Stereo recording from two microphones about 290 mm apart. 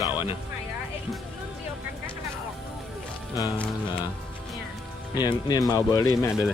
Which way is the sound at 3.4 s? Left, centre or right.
Centre.